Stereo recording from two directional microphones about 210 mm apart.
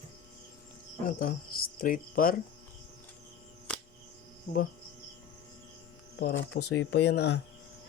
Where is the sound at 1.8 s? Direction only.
40° left (ahead or behind).